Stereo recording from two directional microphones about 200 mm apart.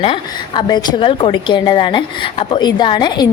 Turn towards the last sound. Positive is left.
turn(degrees=20)  # may be behind; listen again after turning